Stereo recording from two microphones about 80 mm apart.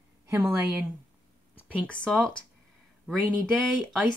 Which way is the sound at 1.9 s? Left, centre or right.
Centre.